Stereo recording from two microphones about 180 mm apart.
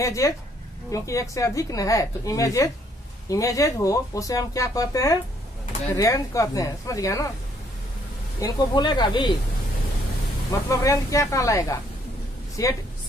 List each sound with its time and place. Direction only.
0.0 s a woman's voice: 15° left (ahead or behind)
8.4 s speech: 20° left (ahead or behind)
10.7 s a woman's voice: 15° left (ahead or behind)